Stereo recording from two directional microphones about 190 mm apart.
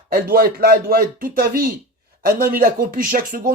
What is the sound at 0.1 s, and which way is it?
Speech, 50° right (ahead or behind).